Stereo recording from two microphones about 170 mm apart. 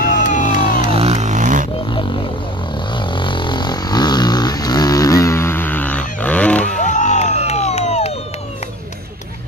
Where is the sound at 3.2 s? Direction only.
30° left (ahead or behind); by 6.8 s 10° left (ahead or behind).